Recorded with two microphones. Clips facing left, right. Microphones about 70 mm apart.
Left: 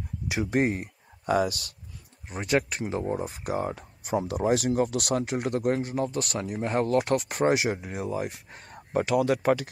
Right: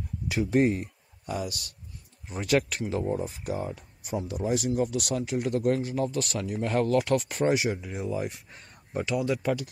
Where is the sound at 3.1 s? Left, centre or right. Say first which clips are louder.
Left 1 dB; left.